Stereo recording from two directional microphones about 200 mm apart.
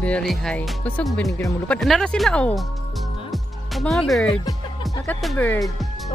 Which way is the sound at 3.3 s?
Centre (ahead or behind).